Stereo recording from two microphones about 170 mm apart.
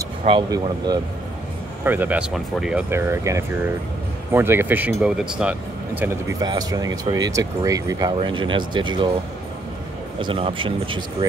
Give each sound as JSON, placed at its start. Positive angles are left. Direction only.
{"t": 0.3, "sound": "speech", "side_deg": -25}
{"t": 1.9, "sound": "speech", "side_deg": -10}
{"t": 2.9, "sound": "speech", "side_deg": -15}
{"t": 6.4, "sound": "speech", "side_deg": -25}
{"t": 10.1, "sound": "speech", "side_deg": -30}